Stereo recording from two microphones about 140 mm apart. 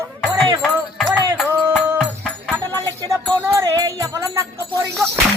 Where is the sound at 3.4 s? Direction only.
20° right (ahead or behind).